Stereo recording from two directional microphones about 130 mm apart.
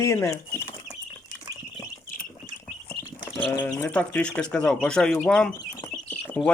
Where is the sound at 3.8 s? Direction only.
10° left (ahead or behind).